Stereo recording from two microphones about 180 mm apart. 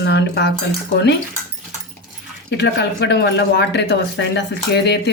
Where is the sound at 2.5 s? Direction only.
70° left (ahead or behind).